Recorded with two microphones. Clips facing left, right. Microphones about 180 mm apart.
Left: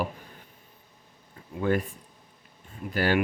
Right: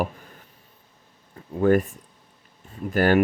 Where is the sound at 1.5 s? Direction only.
45° right (ahead or behind).